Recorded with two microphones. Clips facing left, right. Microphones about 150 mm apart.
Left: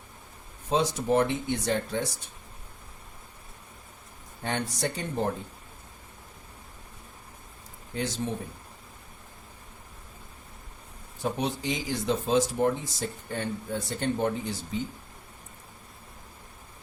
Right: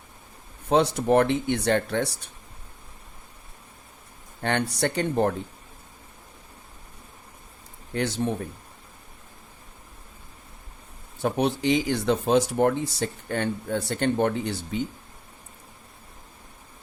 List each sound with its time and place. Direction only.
0.7 s speech: 65° right (ahead or behind)
4.4 s speech: 70° right (ahead or behind)
7.9 s speech: 65° right (ahead or behind)
11.2 s speech: 65° right (ahead or behind)